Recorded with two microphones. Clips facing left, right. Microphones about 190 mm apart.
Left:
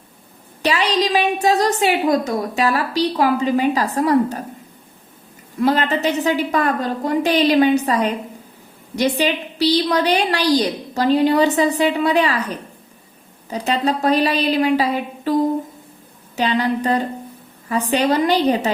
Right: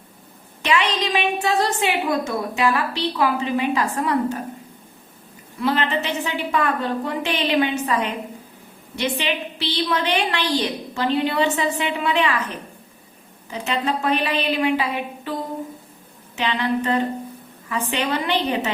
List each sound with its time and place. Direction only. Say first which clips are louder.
0.6 s a woman's voice: left 3 dB; 35° left (ahead or behind)
5.5 s a woman's voice: left 4 dB; 40° left (ahead or behind)
13.5 s a woman's voice: left 4 dB; 40° left (ahead or behind)